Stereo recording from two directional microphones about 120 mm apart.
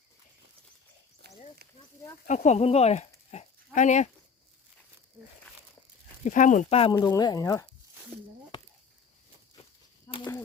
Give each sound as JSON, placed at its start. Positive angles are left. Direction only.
{"t": 2.2, "sound": "speech", "side_deg": 90}
{"t": 6.2, "sound": "speech", "side_deg": 90}
{"t": 6.9, "sound": "speech", "side_deg": 20}
{"t": 7.2, "sound": "speech", "side_deg": 30}
{"t": 8.5, "sound": "a sound", "side_deg": 45}
{"t": 10.1, "sound": "a sound", "side_deg": 30}